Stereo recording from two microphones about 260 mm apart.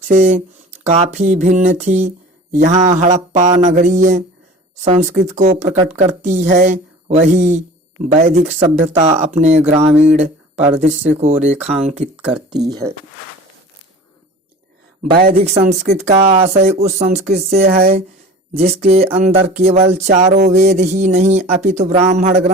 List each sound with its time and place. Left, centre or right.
0.1 s speech: right
10.2 s a sound: right
11.2 s speech: right
12.6 s speech: centre
15.2 s speech: right
16.0 s speech: right